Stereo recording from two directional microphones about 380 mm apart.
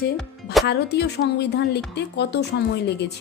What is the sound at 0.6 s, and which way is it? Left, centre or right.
A woman's voice, left.